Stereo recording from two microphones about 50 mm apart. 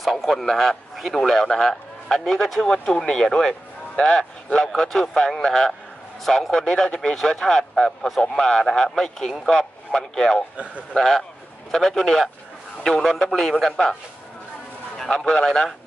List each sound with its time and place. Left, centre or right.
0.0 s a man's voice: centre
10.6 s a man's voice: right
11.0 s a man's voice: centre
15.0 s a man's voice: centre